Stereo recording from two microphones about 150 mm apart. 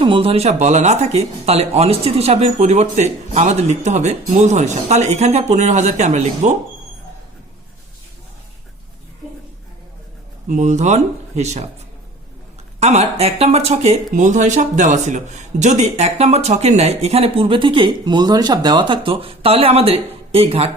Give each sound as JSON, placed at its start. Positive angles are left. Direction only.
{"t": 0.0, "sound": "speech", "side_deg": -35}
{"t": 10.5, "sound": "speech", "side_deg": -50}
{"t": 12.8, "sound": "speech", "side_deg": -45}